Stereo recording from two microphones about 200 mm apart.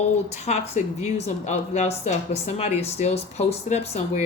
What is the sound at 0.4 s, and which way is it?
Speech, 35° left (ahead or behind).